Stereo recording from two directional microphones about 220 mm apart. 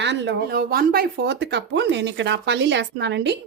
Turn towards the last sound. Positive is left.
turn(degrees=-50)  # may be behind; listen again after turning